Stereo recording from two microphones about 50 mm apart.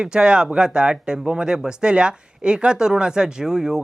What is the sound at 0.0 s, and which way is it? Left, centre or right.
Speech, centre.